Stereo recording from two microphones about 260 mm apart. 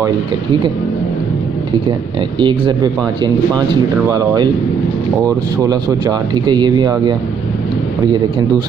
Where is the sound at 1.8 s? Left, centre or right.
Centre.